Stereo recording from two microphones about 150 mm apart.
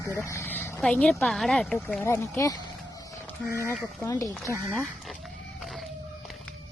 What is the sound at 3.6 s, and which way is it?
Speech, 15° left (ahead or behind).